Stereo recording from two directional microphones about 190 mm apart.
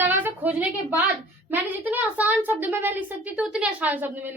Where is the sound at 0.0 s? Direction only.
10° right (ahead or behind).